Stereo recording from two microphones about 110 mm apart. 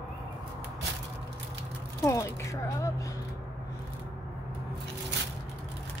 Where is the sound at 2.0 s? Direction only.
30° left (ahead or behind).